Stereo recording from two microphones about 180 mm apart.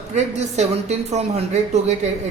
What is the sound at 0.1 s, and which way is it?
Speech, 40° right (ahead or behind).